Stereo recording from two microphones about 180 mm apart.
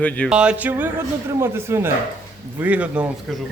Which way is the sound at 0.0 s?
10° left (ahead or behind).